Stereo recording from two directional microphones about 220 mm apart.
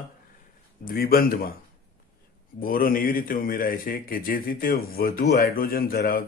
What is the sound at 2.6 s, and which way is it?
A man's voice, 40° left (ahead or behind).